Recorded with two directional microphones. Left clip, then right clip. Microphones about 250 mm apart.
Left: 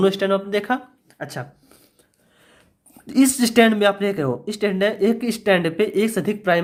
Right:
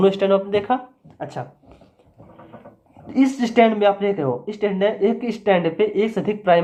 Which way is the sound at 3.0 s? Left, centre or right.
Left.